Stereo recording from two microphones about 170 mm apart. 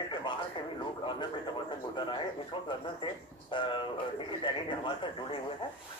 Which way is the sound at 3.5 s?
30° left (ahead or behind).